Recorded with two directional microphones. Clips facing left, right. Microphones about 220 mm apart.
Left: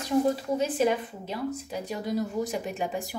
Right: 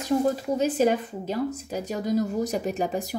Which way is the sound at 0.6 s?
40° right (ahead or behind).